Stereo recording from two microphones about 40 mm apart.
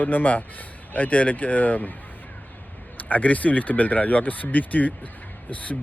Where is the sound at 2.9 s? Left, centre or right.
Left.